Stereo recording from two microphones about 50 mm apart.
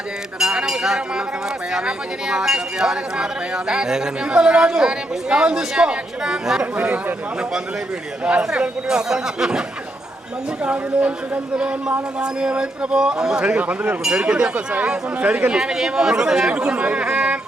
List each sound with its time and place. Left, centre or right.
0.3 s speech: centre
6.7 s a man's voice: right
8.2 s speech: centre
10.6 s a man's voice: right